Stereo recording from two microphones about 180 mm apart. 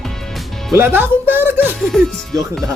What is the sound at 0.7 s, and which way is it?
Music, 10° right (ahead or behind).